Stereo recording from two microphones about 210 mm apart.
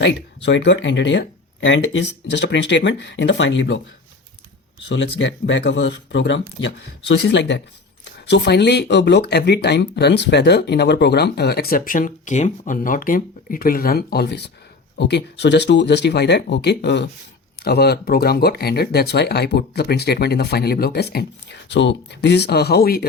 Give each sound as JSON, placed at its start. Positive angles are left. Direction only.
{"t": 0.0, "sound": "speech", "side_deg": 60}
{"t": 4.9, "sound": "speech", "side_deg": 60}